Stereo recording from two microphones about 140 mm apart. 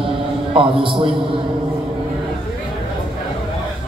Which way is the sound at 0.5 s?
40° right (ahead or behind).